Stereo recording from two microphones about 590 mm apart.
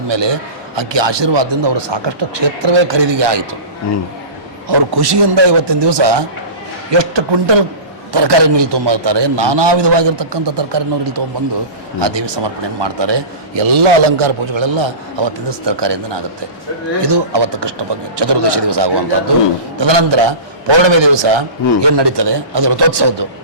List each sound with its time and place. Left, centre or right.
0.1 s a man's voice: right
4.7 s a man's voice: right